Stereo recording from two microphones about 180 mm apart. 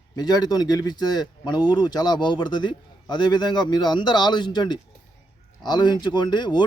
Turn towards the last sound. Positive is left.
turn(degrees=25)  # may be behind; listen again after turning